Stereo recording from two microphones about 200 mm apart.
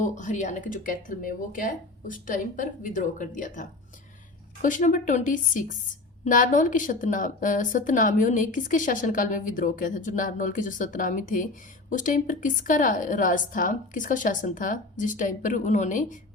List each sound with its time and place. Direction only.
0.0 s speech: 40° left (ahead or behind)